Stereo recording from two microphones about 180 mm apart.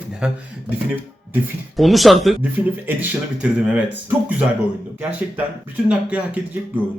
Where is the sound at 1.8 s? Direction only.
Centre (ahead or behind).